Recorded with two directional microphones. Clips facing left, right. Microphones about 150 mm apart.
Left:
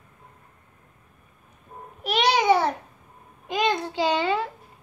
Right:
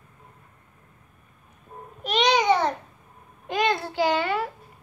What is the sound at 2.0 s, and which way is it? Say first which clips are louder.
Babbling: even; 5° left (ahead or behind).